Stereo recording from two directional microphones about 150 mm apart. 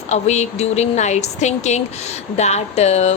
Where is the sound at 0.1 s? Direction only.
50° left (ahead or behind).